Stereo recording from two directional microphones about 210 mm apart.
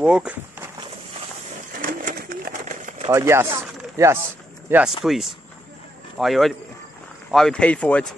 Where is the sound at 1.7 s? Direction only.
40° right (ahead or behind).